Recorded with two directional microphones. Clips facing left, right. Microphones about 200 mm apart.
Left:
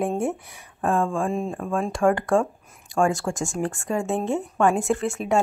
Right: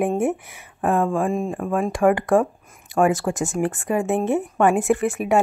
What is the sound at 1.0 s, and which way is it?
Speech, 5° right (ahead or behind).